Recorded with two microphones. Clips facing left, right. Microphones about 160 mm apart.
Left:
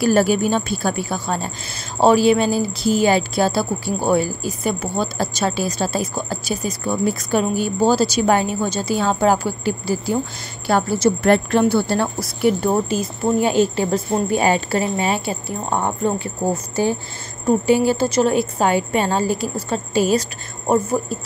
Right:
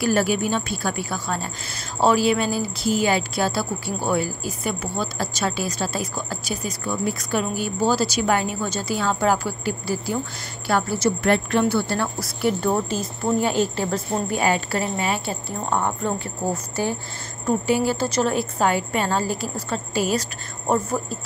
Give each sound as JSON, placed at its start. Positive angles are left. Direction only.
{"t": 0.0, "sound": "speech", "side_deg": 35}
{"t": 12.2, "sound": "a woman's voice", "side_deg": 15}
{"t": 17.5, "sound": "speech", "side_deg": 25}